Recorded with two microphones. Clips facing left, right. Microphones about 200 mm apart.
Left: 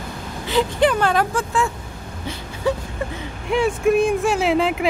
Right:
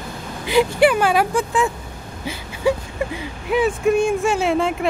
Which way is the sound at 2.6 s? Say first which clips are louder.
Right 3 dB; 10° right (ahead or behind).